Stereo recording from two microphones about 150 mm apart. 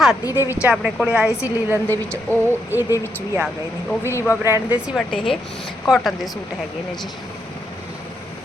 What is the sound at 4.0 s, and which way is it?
Speech, 15° left (ahead or behind).